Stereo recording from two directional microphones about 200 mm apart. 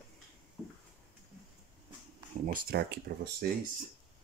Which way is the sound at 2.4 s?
45° right (ahead or behind).